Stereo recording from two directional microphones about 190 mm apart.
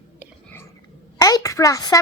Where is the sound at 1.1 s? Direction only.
20° left (ahead or behind).